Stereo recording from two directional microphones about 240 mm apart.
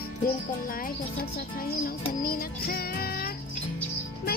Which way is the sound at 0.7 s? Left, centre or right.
Left.